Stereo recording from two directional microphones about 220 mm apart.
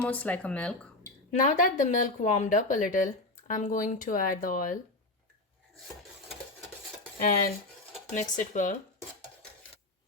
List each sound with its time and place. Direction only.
0.0 s speech: 5° left (ahead or behind)
1.3 s speech: 35° left (ahead or behind)
7.2 s speech: 40° left (ahead or behind)